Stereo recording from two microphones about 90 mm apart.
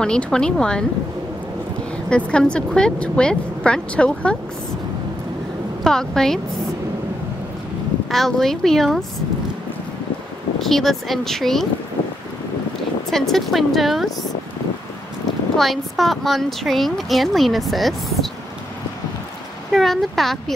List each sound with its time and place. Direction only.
0.0 s a woman's voice: 10° left (ahead or behind)
2.0 s a woman's voice: 10° left (ahead or behind)
5.9 s speech: 5° left (ahead or behind)
8.1 s speech: 5° left (ahead or behind)
10.6 s speech: 5° left (ahead or behind)
13.1 s speech: 5° left (ahead or behind)
15.5 s speech: centre (ahead or behind)
19.7 s speech: centre (ahead or behind)